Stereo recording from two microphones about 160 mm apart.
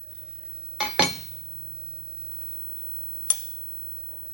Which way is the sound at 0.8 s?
Centre (ahead or behind).